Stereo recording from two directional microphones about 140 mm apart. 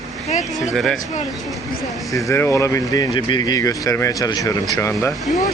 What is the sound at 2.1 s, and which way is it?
Speech, 20° left (ahead or behind).